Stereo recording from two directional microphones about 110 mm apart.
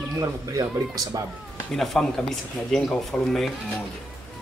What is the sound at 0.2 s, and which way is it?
A man's voice, 30° right (ahead or behind).